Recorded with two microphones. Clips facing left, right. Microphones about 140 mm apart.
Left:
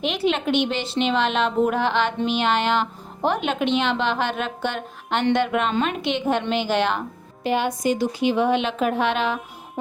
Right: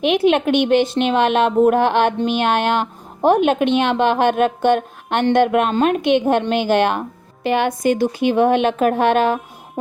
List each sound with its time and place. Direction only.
0.0 s speech: 55° right (ahead or behind)
7.4 s speech: 65° right (ahead or behind); by 9.4 s 50° right (ahead or behind)